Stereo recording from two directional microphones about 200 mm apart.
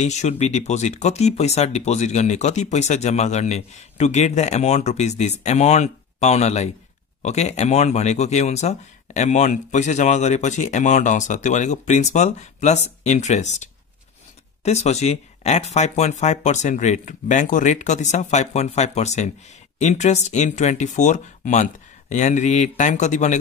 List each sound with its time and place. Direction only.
0.0 s speech: 35° left (ahead or behind)